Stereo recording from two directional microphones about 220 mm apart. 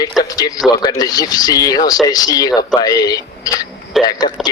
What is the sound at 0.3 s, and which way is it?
Speech, 15° left (ahead or behind).